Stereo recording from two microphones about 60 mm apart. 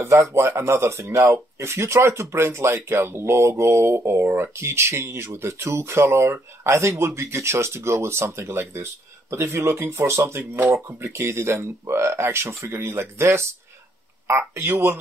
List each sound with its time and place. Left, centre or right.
0.0 s speech: right